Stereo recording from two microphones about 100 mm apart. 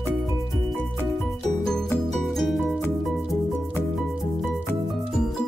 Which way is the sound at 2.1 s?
5° left (ahead or behind).